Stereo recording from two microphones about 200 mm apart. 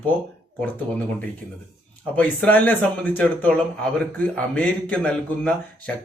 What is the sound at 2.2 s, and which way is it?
Speech, 10° left (ahead or behind).